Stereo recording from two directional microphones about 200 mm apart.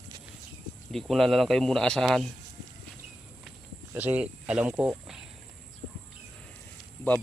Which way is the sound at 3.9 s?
10° right (ahead or behind).